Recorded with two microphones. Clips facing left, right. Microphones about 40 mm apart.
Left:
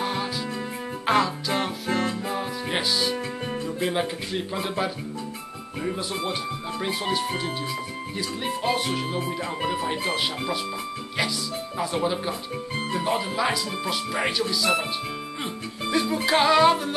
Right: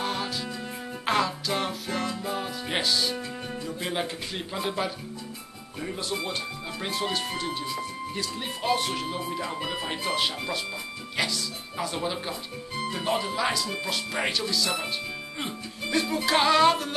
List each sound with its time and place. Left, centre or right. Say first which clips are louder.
0.0 s music: left 3 dB; centre
1.9 s music: left 5 dB; left
2.2 s music: left 3 dB; centre
3.8 s a man's voice: left 4 dB; centre
6.9 s a man's voice: left 3 dB; centre
9.6 s speech: left 5 dB; left
11.8 s a man's voice: left 4 dB; centre
12.9 s music: left 3 dB; centre
14.5 s a man's voice: left 5 dB; centre
15.4 s music: left 3 dB; centre